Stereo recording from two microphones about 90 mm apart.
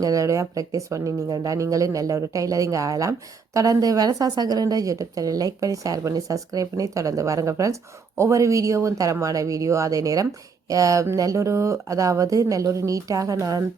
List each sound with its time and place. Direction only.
0.0 s speech: 40° right (ahead or behind)